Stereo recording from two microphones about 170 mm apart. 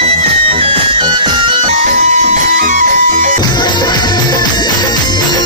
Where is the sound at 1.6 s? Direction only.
45° right (ahead or behind).